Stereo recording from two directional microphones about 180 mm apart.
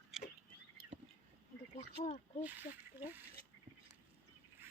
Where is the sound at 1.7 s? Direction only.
35° left (ahead or behind).